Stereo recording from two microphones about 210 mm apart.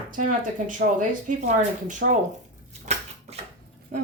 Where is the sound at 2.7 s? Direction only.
30° right (ahead or behind).